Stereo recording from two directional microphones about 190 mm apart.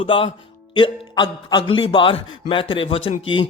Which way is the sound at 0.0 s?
30° left (ahead or behind).